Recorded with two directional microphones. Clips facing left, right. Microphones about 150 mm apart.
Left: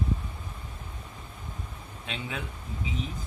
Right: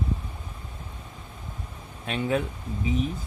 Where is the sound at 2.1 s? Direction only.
50° right (ahead or behind).